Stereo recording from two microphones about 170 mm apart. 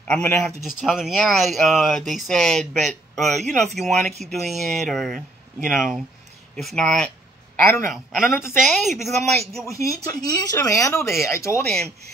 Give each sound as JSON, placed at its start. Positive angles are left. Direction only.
{"t": 0.1, "sound": "speech", "side_deg": 5}
{"t": 0.7, "sound": "speech", "side_deg": 0}
{"t": 9.7, "sound": "speech", "side_deg": 20}
{"t": 11.6, "sound": "speech", "side_deg": 0}